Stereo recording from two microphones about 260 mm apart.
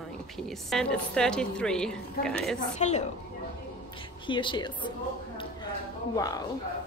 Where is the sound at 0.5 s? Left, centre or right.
Centre.